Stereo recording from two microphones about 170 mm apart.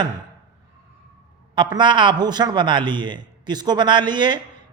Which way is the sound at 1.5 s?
25° right (ahead or behind).